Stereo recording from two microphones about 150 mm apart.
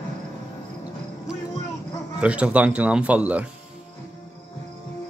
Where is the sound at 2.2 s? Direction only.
10° right (ahead or behind).